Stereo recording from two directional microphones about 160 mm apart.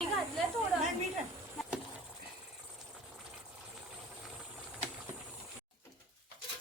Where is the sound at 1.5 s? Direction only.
5° right (ahead or behind).